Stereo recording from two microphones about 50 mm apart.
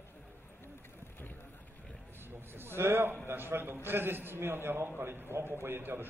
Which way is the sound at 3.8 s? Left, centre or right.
Right.